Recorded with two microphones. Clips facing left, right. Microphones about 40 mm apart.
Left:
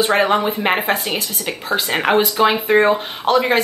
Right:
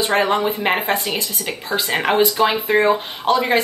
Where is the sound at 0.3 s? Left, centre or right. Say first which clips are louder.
Left 1 dB; centre.